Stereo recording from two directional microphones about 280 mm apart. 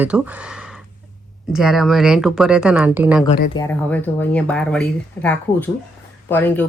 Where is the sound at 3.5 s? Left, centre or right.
Centre.